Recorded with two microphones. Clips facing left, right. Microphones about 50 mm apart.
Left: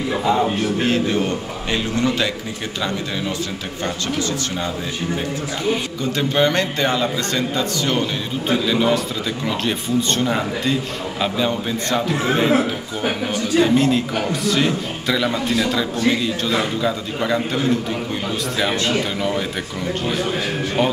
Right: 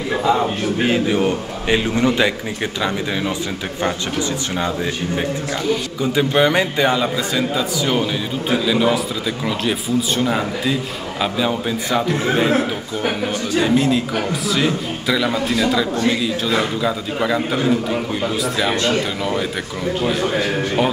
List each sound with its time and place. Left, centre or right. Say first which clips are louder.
0.2 s a man's voice: right 1 dB; centre; by 2.3 s right
3.8 s speech: right 2 dB; centre
6.1 s a man's voice: right 2 dB; centre